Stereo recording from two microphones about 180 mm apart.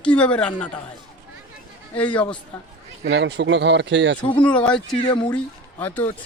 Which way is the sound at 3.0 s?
70° right (ahead or behind).